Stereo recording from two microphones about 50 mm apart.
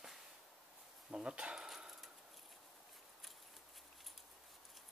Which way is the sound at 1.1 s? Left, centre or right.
Centre.